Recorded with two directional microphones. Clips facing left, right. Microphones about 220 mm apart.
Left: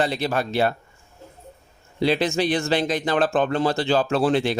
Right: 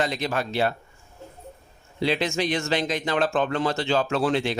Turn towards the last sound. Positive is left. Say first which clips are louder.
# left 3 dB
turn(degrees=35)  # may be behind; listen again after turning